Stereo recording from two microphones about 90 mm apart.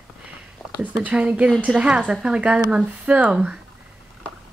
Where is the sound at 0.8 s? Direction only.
15° right (ahead or behind).